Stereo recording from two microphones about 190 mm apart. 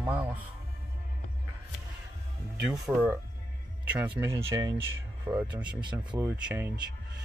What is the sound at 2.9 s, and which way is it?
Speech, centre (ahead or behind).